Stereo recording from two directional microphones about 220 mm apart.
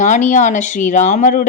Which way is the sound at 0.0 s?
35° left (ahead or behind).